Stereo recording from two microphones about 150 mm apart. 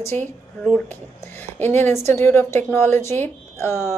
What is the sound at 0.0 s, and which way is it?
A woman's voice, 15° left (ahead or behind).